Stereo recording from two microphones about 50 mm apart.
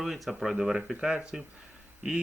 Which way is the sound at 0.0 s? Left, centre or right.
Centre.